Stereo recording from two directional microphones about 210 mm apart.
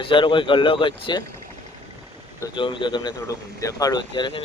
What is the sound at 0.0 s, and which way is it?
Speech, 25° left (ahead or behind).